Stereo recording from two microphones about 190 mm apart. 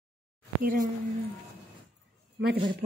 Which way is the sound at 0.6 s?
50° right (ahead or behind).